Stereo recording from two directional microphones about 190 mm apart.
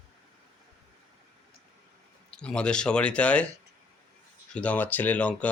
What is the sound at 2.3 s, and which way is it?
Speech, 5° left (ahead or behind).